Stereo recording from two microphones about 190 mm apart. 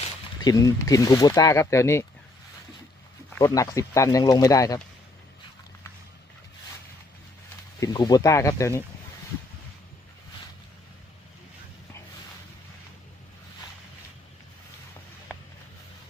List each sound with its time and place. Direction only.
0.4 s speech: 20° left (ahead or behind)
3.3 s speech: 15° left (ahead or behind)
7.8 s speech: 20° left (ahead or behind)